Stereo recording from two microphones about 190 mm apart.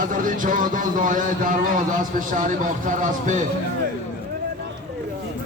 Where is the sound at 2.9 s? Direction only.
40° right (ahead or behind).